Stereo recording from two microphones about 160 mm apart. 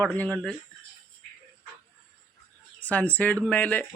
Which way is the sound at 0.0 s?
10° left (ahead or behind).